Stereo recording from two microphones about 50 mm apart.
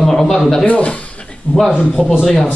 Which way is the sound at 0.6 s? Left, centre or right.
Left.